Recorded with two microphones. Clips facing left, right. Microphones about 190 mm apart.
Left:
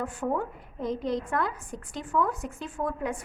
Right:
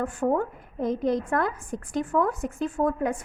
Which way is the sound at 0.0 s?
50° right (ahead or behind).